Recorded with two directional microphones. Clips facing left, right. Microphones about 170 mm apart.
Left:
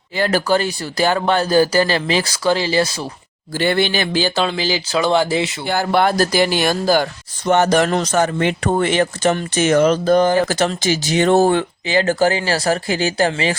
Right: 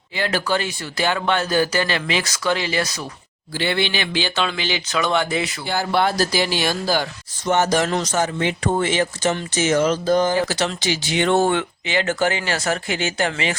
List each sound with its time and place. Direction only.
0.2 s speech: 40° left (ahead or behind)
3.5 s speech: 45° left (ahead or behind); by 5.5 s 30° left (ahead or behind)
5.6 s speech: 55° left (ahead or behind); by 13.6 s 35° left (ahead or behind)